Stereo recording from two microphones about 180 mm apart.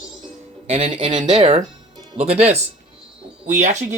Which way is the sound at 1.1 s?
40° right (ahead or behind).